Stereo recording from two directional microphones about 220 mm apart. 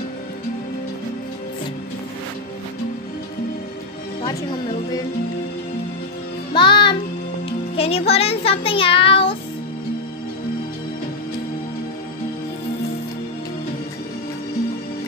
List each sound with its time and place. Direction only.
4.2 s speech: 20° left (ahead or behind)
6.5 s music: 20° left (ahead or behind)
7.7 s speech: 25° left (ahead or behind)